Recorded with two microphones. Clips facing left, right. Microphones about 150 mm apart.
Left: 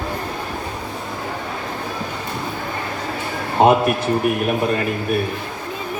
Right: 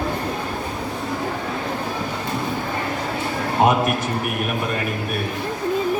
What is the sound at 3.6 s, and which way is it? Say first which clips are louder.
Speech: left 4 dB; 30° left (ahead or behind).